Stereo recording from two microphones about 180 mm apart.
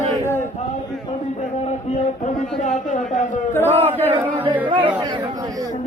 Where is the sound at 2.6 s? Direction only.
45° left (ahead or behind).